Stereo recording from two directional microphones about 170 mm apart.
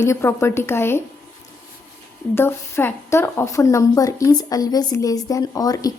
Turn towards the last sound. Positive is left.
turn(degrees=20)  # may be behind; listen again after turning